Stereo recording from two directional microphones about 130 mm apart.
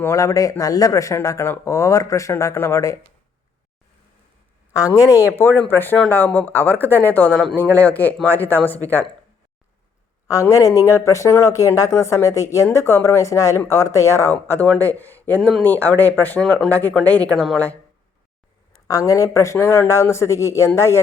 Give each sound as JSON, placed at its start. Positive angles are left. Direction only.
{"t": 0.0, "sound": "speech", "side_deg": 25}
{"t": 4.7, "sound": "speech", "side_deg": 25}
{"t": 10.2, "sound": "speech", "side_deg": 25}
{"t": 18.9, "sound": "speech", "side_deg": 25}